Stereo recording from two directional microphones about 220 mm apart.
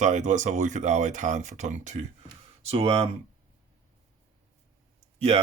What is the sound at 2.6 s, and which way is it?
Rub, 25° right (ahead or behind).